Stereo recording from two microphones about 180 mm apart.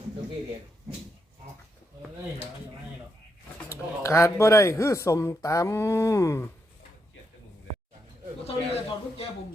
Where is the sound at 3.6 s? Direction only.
15° left (ahead or behind).